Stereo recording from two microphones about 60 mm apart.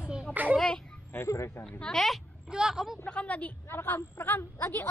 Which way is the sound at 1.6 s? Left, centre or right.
Centre.